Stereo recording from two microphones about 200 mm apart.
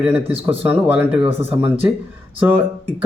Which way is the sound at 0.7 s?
5° right (ahead or behind).